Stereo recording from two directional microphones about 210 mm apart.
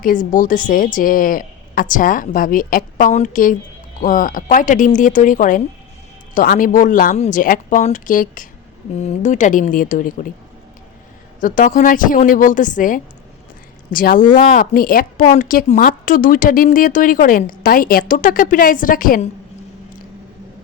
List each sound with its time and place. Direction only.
0.0 s a woman's voice: 40° left (ahead or behind)
11.3 s a woman's voice: 40° left (ahead or behind)